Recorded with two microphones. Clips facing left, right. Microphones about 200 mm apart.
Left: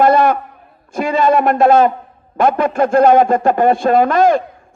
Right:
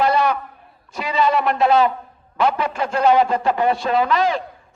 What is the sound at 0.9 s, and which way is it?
A man's voice, 50° left (ahead or behind).